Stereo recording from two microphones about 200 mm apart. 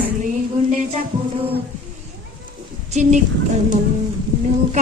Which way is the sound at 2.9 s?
35° right (ahead or behind).